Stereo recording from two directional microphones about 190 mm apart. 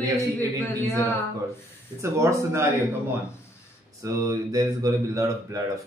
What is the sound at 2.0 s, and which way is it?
Speech, 15° right (ahead or behind).